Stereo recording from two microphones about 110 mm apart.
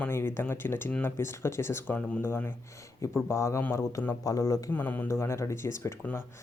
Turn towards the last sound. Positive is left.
turn(degrees=20)  # may be behind; listen again after turning